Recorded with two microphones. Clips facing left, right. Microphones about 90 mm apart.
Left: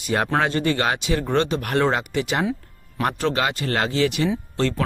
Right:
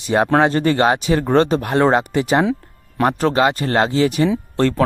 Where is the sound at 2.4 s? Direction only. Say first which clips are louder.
Right 5 dB; 90° right.